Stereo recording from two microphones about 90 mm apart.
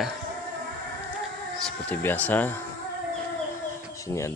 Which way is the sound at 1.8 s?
15° left (ahead or behind).